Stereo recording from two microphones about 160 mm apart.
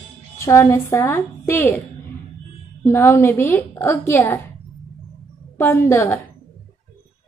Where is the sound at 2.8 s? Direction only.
15° left (ahead or behind).